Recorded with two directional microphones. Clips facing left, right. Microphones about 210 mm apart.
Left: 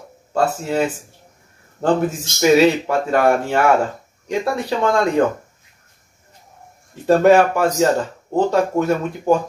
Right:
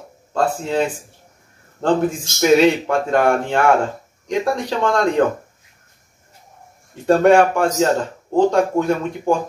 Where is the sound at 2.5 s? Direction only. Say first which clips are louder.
Right 2 dB; 5° left (ahead or behind).